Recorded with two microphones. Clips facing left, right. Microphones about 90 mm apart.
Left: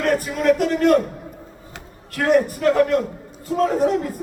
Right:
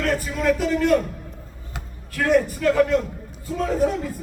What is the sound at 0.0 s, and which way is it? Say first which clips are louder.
Speech: left 3 dB; 55° left (ahead or behind).